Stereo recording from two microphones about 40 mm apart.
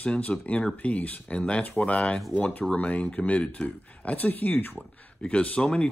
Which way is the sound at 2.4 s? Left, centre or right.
Left.